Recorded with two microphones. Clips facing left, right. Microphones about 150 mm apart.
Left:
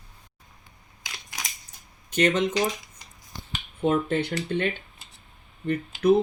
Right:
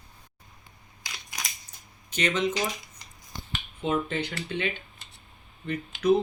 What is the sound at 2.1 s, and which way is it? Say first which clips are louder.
Speech: left 6 dB; 50° left (ahead or behind).